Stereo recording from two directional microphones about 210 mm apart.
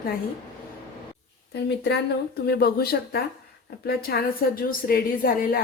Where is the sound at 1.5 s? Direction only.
55° left (ahead or behind).